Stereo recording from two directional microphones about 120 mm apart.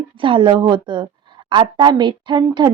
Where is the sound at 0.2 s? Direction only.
45° right (ahead or behind).